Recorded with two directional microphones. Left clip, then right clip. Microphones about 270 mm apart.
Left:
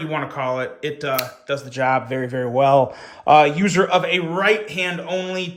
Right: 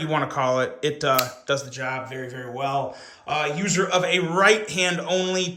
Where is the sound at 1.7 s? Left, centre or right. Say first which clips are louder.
Left 10 dB; centre.